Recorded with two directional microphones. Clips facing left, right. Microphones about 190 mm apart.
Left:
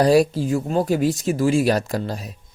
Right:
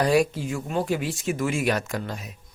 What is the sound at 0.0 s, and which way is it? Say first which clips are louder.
Speech: left 5 dB; 35° left (ahead or behind).